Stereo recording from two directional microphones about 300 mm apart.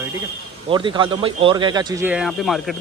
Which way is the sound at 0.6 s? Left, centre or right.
Centre.